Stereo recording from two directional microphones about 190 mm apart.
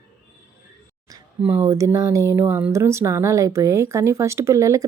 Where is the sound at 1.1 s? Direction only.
15° right (ahead or behind).